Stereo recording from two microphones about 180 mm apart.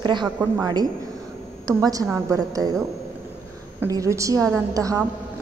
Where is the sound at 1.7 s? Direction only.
20° right (ahead or behind).